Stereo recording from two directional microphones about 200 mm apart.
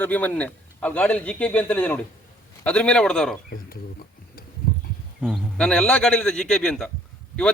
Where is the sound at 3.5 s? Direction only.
45° left (ahead or behind).